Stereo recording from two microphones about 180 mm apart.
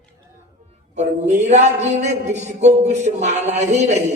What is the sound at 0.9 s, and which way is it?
Speech, 40° right (ahead or behind).